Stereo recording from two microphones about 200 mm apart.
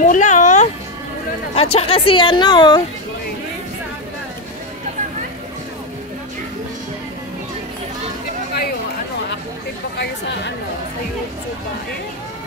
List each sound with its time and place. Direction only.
0.0 s music: 40° left (ahead or behind)
1.5 s speech: 30° left (ahead or behind)
9.9 s speech: 60° left (ahead or behind)